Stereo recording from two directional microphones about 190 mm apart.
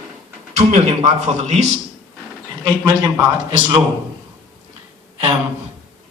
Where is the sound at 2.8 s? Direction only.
20° right (ahead or behind).